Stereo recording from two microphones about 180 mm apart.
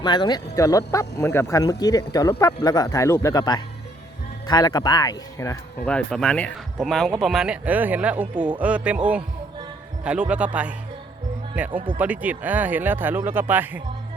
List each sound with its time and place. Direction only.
0.0 s speech: 25° left (ahead or behind); by 13.8 s 10° right (ahead or behind)